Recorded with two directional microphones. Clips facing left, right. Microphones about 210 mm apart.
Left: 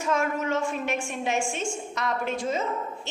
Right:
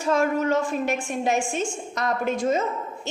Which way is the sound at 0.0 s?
35° right (ahead or behind).